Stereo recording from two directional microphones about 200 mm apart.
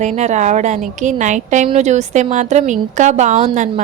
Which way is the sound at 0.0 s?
35° right (ahead or behind).